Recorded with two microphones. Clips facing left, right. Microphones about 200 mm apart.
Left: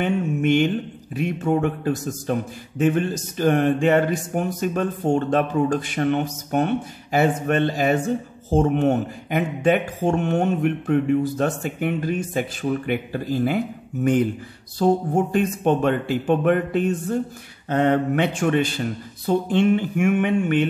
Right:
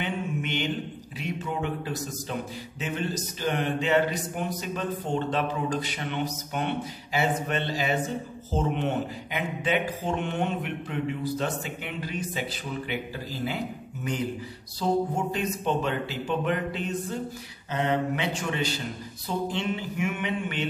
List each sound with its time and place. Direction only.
0.0 s mantra: 50° left (ahead or behind)
1.1 s speech: 50° left (ahead or behind)